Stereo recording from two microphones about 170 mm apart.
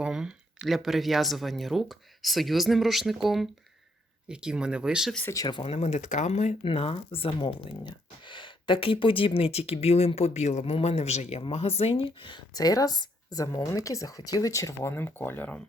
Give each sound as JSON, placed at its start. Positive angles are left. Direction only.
{"t": 0.0, "sound": "speech", "side_deg": -5}
{"t": 5.2, "sound": "speech", "side_deg": 20}
{"t": 5.7, "sound": "speech", "side_deg": 40}